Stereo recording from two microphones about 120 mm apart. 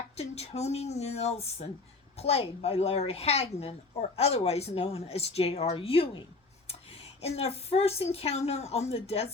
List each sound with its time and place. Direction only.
0.2 s a woman's voice: 60° left (ahead or behind)